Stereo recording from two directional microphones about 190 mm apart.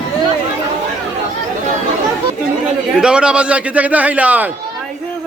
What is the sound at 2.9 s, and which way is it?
A man's voice, 5° right (ahead or behind).